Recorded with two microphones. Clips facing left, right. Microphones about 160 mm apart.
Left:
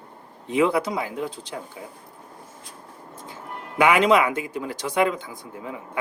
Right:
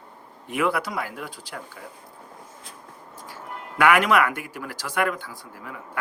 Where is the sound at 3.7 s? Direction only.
20° left (ahead or behind).